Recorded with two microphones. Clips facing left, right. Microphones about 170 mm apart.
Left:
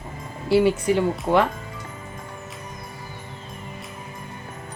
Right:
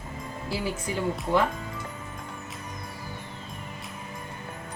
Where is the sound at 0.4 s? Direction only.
70° left (ahead or behind).